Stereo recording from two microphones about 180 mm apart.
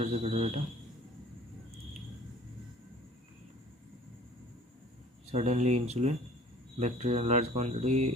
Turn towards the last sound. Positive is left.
turn(degrees=-40)  # may be behind; listen again after turning